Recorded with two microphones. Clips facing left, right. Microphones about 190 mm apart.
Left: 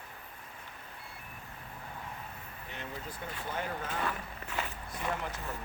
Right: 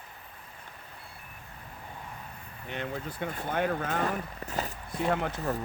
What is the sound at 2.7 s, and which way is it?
Speech, 70° right (ahead or behind).